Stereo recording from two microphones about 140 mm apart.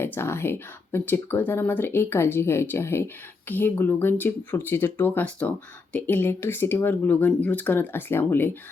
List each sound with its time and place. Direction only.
0.0 s speech: 15° left (ahead or behind)